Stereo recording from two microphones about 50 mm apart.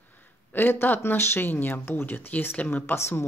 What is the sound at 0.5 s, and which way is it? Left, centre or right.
Speech, left.